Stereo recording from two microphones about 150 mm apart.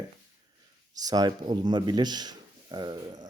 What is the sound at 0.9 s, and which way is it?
Speech, 25° right (ahead or behind).